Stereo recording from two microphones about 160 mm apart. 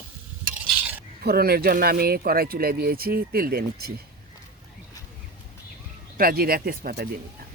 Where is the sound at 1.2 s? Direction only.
80° right.